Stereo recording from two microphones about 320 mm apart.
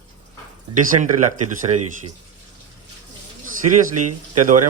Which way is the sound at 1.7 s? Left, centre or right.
Centre.